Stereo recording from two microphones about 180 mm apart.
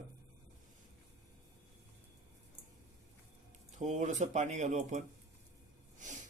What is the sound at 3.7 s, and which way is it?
Speech, 40° right (ahead or behind).